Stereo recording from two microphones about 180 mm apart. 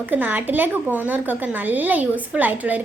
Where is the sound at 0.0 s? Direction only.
10° right (ahead or behind).